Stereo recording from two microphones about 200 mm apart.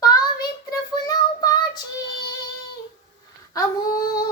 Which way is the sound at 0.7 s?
20° left (ahead or behind).